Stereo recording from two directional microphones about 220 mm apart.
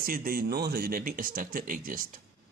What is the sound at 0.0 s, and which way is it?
Speech, 40° right (ahead or behind).